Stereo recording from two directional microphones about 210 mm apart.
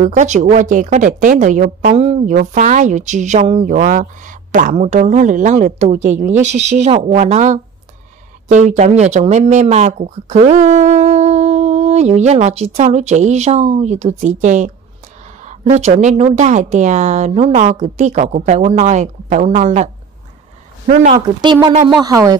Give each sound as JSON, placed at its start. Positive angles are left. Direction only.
{"t": 0.0, "sound": "a woman's voice", "side_deg": -35}
{"t": 21.1, "sound": "speech", "side_deg": -20}